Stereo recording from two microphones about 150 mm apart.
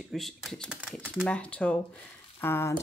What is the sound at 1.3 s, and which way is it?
Speech, 10° left (ahead or behind).